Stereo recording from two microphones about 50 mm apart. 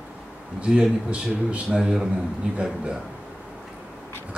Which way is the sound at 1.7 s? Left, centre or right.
Centre.